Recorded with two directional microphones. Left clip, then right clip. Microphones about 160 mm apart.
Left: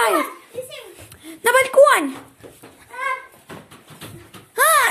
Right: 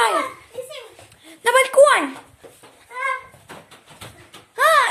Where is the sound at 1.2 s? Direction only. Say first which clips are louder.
Even; 25° left (ahead or behind).